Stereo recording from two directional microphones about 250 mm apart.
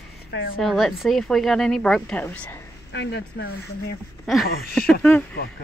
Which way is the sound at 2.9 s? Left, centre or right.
Left.